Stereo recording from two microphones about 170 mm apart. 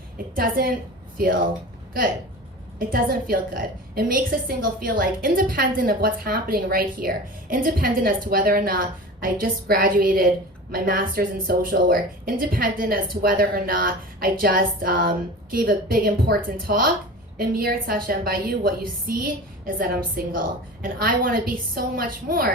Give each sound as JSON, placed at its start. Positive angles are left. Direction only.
{"t": 0.3, "sound": "a woman's voice", "side_deg": -55}
{"t": 2.7, "sound": "a woman's voice", "side_deg": -60}